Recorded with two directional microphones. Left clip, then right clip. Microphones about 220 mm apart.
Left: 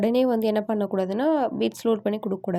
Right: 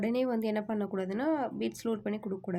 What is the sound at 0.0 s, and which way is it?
Speech, 30° left (ahead or behind).